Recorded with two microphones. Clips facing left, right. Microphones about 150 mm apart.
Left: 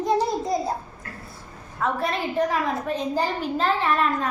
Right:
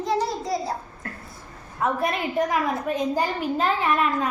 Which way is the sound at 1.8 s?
10° right (ahead or behind).